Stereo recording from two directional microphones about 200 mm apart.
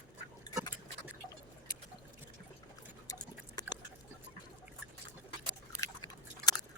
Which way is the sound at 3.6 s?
20° left (ahead or behind).